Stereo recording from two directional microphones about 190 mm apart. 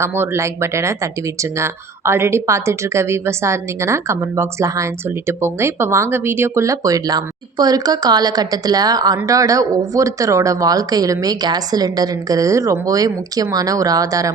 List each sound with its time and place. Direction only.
0.0 s a woman's voice: 15° right (ahead or behind)